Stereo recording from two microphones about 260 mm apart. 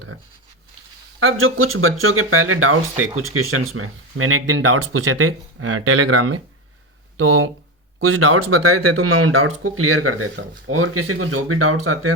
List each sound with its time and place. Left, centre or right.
1.2 s speech: right